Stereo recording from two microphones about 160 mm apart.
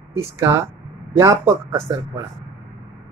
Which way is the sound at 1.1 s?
15° right (ahead or behind).